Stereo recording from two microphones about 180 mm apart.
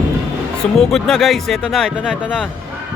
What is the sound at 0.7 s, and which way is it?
Speech, centre (ahead or behind).